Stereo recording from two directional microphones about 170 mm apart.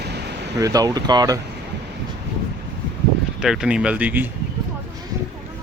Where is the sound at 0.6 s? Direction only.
20° right (ahead or behind).